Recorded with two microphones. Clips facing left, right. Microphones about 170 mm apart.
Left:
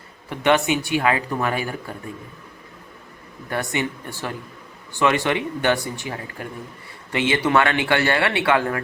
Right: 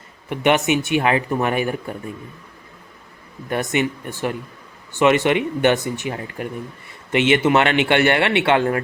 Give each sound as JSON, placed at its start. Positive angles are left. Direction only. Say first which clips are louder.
{"t": 0.3, "sound": "speech", "louder": "right 1 dB", "side_deg": -20}
{"t": 3.5, "sound": "speech", "louder": "right 4 dB", "side_deg": -20}